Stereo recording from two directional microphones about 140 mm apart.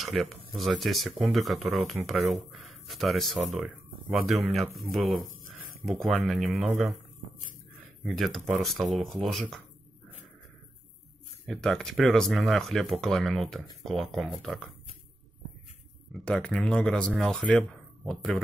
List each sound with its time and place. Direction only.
0.0 s speech: centre (ahead or behind)
8.0 s speech: centre (ahead or behind)
11.4 s speech: 5° left (ahead or behind)
16.1 s speech: 5° left (ahead or behind)